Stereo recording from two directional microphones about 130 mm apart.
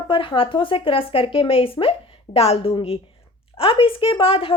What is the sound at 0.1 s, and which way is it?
A woman's voice, 40° left (ahead or behind).